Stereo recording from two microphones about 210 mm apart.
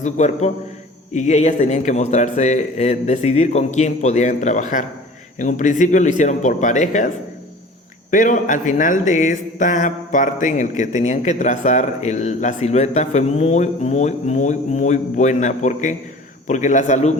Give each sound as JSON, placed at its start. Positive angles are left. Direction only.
{"t": 0.0, "sound": "speech", "side_deg": 35}
{"t": 8.1, "sound": "speech", "side_deg": 40}